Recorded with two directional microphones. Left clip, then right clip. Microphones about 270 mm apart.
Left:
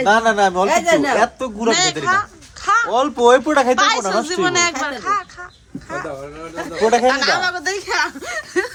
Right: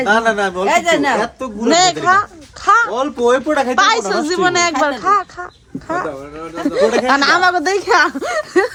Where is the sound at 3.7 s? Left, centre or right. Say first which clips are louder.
Right 3 dB; centre.